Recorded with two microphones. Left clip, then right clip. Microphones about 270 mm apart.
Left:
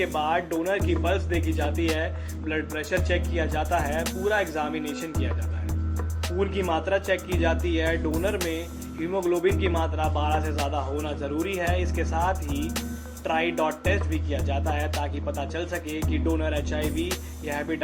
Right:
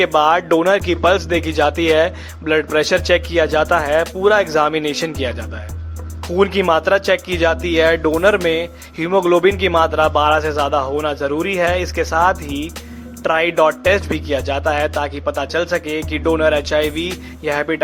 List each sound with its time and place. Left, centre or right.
0.0 s speech: right
6.3 s speech: right